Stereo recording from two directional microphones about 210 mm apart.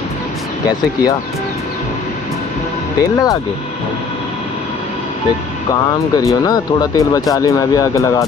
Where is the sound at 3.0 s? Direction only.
15° left (ahead or behind).